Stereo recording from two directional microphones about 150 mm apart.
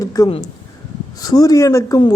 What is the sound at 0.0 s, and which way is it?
A man's voice, 25° left (ahead or behind).